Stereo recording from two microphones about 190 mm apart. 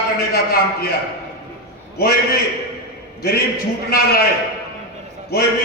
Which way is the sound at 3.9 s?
55° left (ahead or behind).